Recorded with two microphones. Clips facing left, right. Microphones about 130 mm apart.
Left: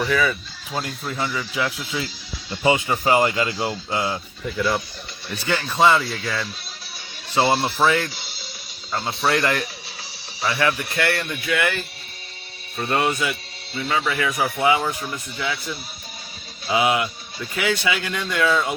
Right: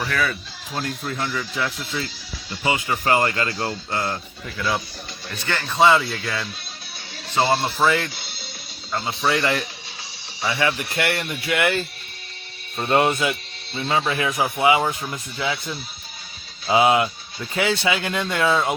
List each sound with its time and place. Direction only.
0.1 s speech: centre (ahead or behind)
2.6 s speech: 25° left (ahead or behind); by 9.6 s centre (ahead or behind)
10.6 s speech: 25° right (ahead or behind)